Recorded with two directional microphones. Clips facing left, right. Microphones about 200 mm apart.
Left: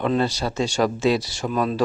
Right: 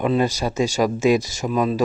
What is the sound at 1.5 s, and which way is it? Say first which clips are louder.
Speech: right 3 dB; 5° right (ahead or behind).